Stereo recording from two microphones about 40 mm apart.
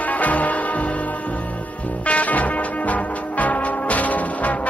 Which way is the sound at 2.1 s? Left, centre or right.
Left.